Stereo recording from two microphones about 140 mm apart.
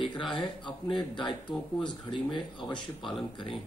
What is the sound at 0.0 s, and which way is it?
Speech, 35° left (ahead or behind).